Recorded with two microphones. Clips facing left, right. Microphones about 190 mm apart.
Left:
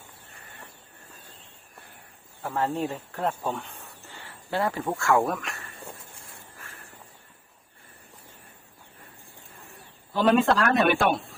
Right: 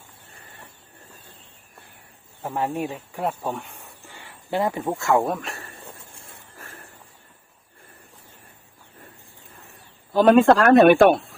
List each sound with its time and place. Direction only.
2.4 s speech: 15° right (ahead or behind); by 5.7 s 35° right (ahead or behind)
10.1 s a man's voice: 50° right (ahead or behind)